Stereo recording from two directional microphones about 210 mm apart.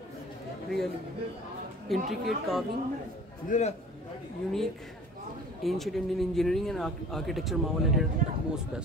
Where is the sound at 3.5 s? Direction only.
35° left (ahead or behind).